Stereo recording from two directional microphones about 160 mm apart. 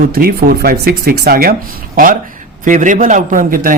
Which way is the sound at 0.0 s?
65° right (ahead or behind).